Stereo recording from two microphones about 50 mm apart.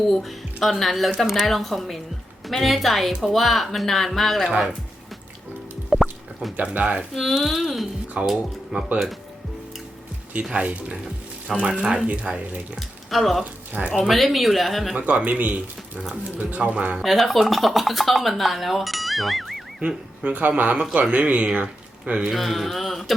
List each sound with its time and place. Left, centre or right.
0.1 s speech: centre
5.9 s music: centre
6.7 s speech: right
7.1 s speech: centre
8.2 s speech: right
10.5 s speech: right
13.1 s speech: centre
14.9 s speech: right
17.0 s speech: centre
20.2 s a man's voice: right
22.3 s speech: centre